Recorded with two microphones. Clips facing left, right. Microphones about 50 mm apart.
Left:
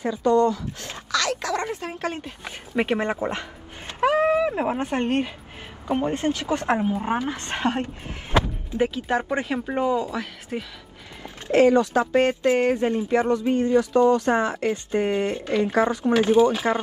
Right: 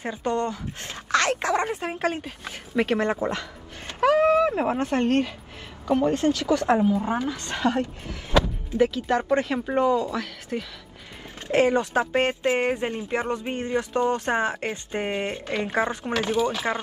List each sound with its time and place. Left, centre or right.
0.0 s speech: right
2.4 s a sound: centre
4.7 s speech: centre; by 8.8 s left
8.8 s speech: centre
11.4 s speech: right
16.2 s speech: left